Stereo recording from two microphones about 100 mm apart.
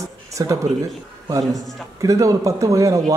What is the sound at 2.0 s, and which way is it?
A man's voice, 30° right (ahead or behind).